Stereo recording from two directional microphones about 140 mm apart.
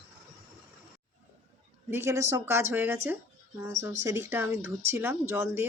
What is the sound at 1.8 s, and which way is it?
Speech, 20° right (ahead or behind).